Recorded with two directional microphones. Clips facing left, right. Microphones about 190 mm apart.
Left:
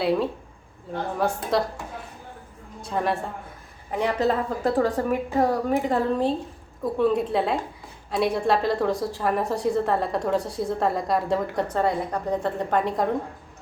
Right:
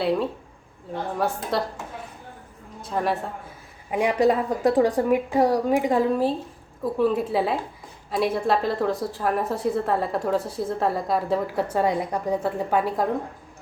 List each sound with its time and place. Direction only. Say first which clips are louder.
0.0 s a woman's voice: even; centre (ahead or behind)
2.8 s a woman's voice: even; centre (ahead or behind)
3.9 s a woman's voice: right 3 dB; 10° right (ahead or behind)